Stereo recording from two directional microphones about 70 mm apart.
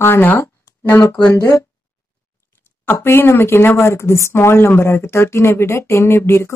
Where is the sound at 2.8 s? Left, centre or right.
Left.